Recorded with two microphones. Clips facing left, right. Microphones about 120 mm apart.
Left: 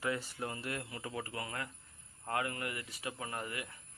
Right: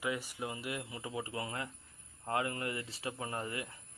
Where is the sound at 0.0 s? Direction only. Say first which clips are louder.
Even; 15° right (ahead or behind).